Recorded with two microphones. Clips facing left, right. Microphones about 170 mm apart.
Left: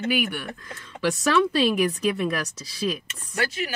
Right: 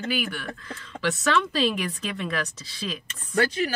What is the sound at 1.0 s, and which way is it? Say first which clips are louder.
Speech: left 3 dB; 10° left (ahead or behind).